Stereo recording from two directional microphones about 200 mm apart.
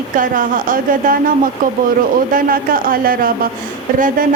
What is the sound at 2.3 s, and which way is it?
Speech, 45° right (ahead or behind).